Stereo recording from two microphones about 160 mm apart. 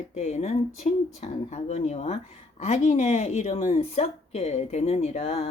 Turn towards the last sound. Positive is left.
turn(degrees=40)  # may be behind; listen again after turning